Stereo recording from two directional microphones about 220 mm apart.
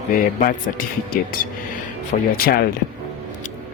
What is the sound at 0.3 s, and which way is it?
Speech, 40° left (ahead or behind).